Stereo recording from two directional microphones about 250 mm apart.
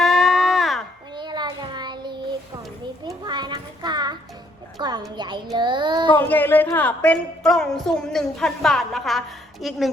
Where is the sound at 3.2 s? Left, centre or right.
Centre.